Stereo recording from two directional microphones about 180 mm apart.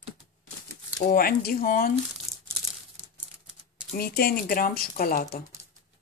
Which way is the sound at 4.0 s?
55° left (ahead or behind).